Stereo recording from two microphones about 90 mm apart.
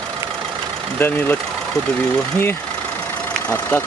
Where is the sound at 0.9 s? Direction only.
20° left (ahead or behind).